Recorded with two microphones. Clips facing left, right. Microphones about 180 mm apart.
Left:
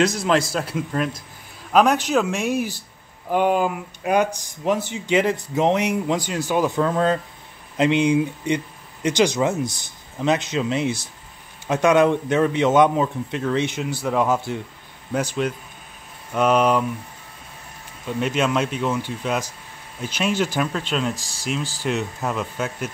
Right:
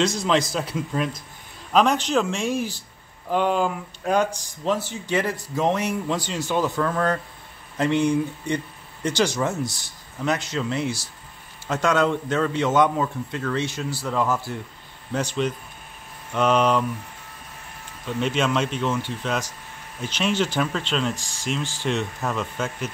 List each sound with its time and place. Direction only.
0.2 s speech: 5° left (ahead or behind); by 14.6 s 20° left (ahead or behind)
15.1 s speech: 10° left (ahead or behind)
18.0 s speech: 5° left (ahead or behind)
21.2 s speech: 40° left (ahead or behind)
21.8 s speech: 5° left (ahead or behind)